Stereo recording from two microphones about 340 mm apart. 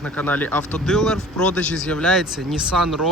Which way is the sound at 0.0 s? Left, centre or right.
Centre.